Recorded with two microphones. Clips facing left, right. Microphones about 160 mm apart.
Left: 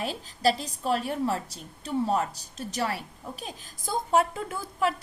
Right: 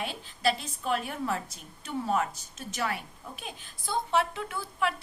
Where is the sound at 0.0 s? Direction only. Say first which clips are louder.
Left 3 dB; 40° left (ahead or behind).